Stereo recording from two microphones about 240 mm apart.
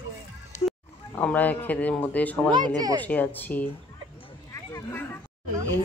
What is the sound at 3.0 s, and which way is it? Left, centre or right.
Speech, centre.